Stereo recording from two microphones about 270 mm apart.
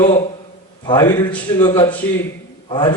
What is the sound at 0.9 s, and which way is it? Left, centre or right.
A man's voice, centre.